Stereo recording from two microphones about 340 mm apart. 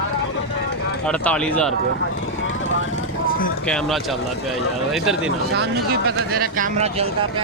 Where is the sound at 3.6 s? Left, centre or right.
Centre.